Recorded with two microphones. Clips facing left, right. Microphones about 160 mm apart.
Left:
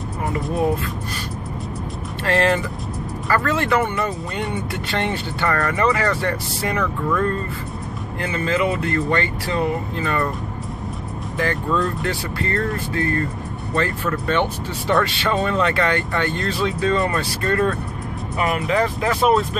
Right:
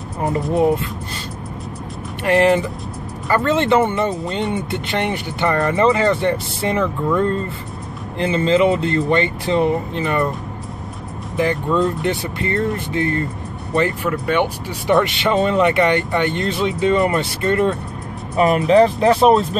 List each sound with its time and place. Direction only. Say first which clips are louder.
0.5 s speech: right 5 dB; 25° right (ahead or behind)
2.2 s speech: right 4 dB; 15° right (ahead or behind)
11.3 s speech: right 4 dB; 20° right (ahead or behind)